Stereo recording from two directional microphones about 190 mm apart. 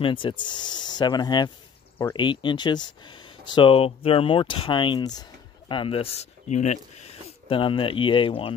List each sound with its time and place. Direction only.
0.0 s speech: 25° left (ahead or behind)